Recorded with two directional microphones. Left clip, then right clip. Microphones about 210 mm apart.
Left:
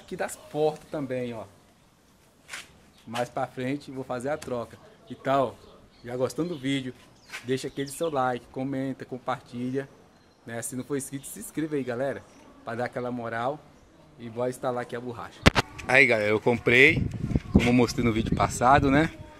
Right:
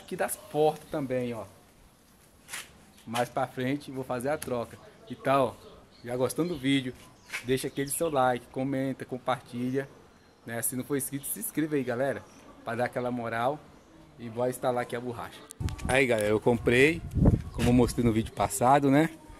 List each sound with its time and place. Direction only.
0.0 s speech: 10° right (ahead or behind)
3.3 s speech: 10° right (ahead or behind)